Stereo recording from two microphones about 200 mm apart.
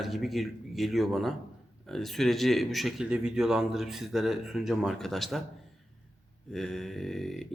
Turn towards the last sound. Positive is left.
turn(degrees=0)  # may be behind; listen again after turning